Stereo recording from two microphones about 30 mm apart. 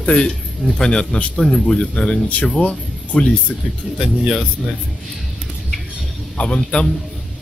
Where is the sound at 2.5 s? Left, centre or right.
Left.